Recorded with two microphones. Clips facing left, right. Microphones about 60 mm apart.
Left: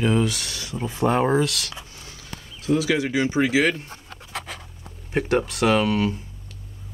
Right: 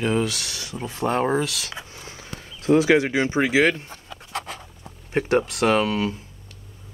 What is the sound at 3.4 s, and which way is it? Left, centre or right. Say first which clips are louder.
Speech: right 2 dB; right.